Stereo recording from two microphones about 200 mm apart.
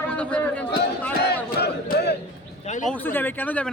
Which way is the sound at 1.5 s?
55° left (ahead or behind).